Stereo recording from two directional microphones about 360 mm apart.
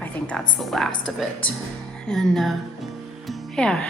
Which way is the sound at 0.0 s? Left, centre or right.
Centre.